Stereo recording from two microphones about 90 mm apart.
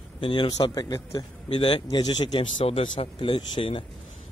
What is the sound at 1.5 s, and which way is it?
Speech, 70° left (ahead or behind).